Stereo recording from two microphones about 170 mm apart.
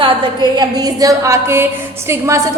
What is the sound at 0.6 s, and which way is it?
A woman's voice, 20° right (ahead or behind).